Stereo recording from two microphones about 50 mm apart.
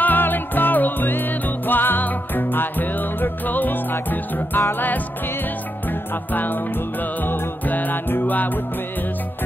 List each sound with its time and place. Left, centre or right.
0.0 s music: left
6.3 s music: left